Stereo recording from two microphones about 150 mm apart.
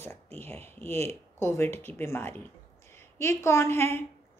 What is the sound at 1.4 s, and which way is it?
A woman's voice, 15° left (ahead or behind).